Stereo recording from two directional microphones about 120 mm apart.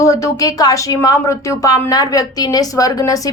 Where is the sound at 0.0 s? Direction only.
25° left (ahead or behind).